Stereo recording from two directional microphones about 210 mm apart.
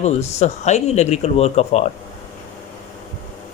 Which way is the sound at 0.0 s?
30° left (ahead or behind).